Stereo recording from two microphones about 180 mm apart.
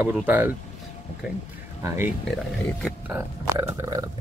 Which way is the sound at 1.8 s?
15° right (ahead or behind).